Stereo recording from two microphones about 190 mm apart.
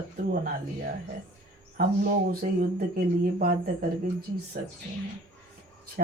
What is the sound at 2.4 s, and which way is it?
Speech, 45° right (ahead or behind).